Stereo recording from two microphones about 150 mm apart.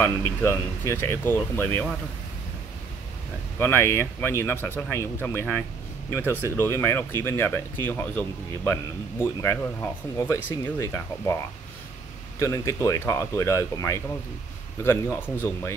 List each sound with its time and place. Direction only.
0.0 s speech: 15° left (ahead or behind)
3.5 s speech: 15° left (ahead or behind)
12.4 s speech: 20° left (ahead or behind)